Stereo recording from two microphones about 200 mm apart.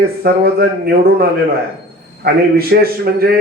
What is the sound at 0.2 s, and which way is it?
A man's voice, 50° right (ahead or behind).